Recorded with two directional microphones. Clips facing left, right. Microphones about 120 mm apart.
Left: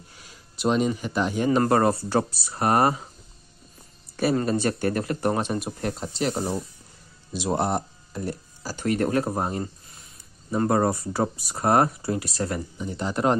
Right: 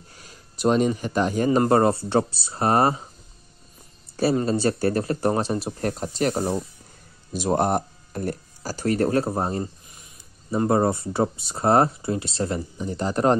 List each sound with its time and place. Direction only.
0.2 s a sound: 45° right (ahead or behind)
1.0 s speech: 45° right (ahead or behind)
1.6 s speech: 25° right (ahead or behind)
4.4 s speech: 30° right (ahead or behind)
5.8 s speech: 45° right (ahead or behind)
10.6 s speech: 25° right (ahead or behind)